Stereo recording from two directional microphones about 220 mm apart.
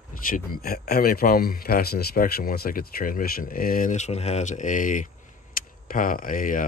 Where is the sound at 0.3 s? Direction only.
40° left (ahead or behind).